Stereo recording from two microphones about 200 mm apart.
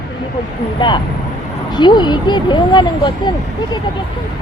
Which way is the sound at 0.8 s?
25° left (ahead or behind).